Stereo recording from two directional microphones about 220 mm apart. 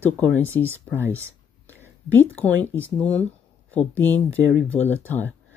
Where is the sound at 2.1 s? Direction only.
10° left (ahead or behind).